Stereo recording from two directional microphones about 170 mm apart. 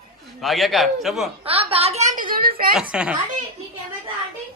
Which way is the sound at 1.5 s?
35° right (ahead or behind).